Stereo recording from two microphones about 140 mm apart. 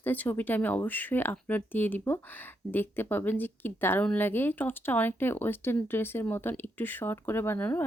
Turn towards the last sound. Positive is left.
turn(degrees=15)  # may be behind; listen again after turning